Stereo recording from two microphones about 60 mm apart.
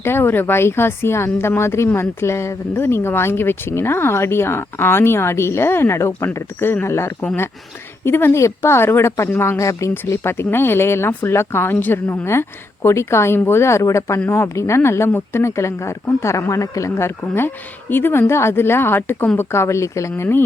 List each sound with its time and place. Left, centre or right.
0.0 s speech: left
9.6 s speech: left
10.1 s speech: left
12.2 s speech: left
16.5 s speech: left
17.3 s speech: left
19.4 s speech: left